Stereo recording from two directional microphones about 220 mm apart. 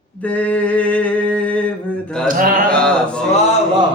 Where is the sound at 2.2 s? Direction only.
40° right (ahead or behind).